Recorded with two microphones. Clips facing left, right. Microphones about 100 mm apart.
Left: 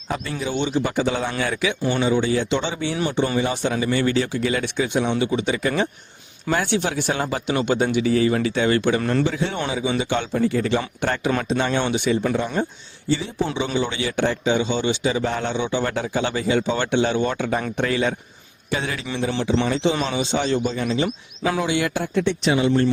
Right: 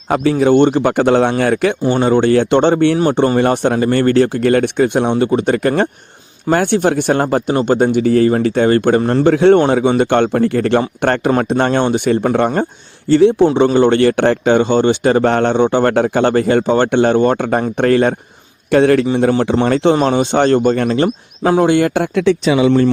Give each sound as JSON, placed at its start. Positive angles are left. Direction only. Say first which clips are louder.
{"t": 0.1, "sound": "speech", "louder": "right 14 dB", "side_deg": -65}
{"t": 9.0, "sound": "speech", "louder": "right 7 dB", "side_deg": -35}
{"t": 9.2, "sound": "speech", "louder": "right 15 dB", "side_deg": -60}
{"t": 22.0, "sound": "speech", "louder": "right 7 dB", "side_deg": -90}